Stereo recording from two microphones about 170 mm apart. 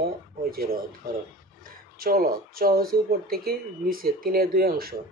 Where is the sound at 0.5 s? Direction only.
60° right (ahead or behind).